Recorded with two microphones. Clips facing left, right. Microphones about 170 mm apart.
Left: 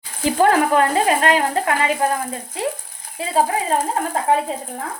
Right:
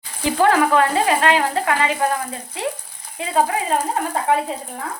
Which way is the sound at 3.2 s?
35° left (ahead or behind).